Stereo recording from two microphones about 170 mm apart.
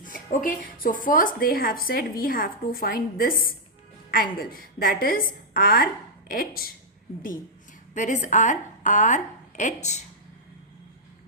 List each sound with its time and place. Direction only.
0.0 s speech: 55° left (ahead or behind)
7.9 s a woman's voice: 45° left (ahead or behind)